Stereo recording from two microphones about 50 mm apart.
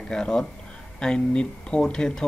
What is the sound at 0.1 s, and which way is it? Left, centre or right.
Speech, centre.